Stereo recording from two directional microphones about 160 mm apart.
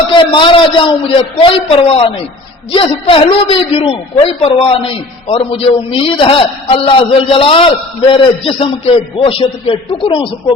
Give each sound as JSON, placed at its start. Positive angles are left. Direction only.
{"t": 0.1, "sound": "a man's voice", "side_deg": 30}